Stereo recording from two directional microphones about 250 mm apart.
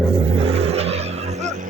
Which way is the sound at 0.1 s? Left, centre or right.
Right.